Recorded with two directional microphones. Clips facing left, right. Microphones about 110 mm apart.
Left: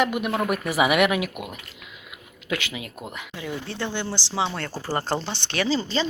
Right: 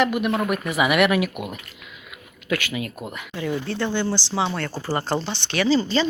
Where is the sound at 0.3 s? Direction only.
Centre (ahead or behind).